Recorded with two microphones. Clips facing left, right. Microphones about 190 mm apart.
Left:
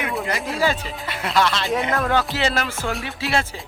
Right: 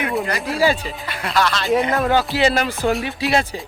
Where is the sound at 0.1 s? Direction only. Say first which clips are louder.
Right 3 dB; centre (ahead or behind).